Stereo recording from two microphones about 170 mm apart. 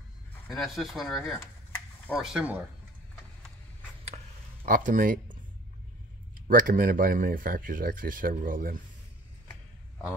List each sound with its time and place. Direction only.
0.5 s speech: centre (ahead or behind)
1.4 s a sound: 10° left (ahead or behind)
2.1 s speech: 5° right (ahead or behind)
4.6 s speech: 55° right (ahead or behind)
6.4 s speech: 55° right (ahead or behind)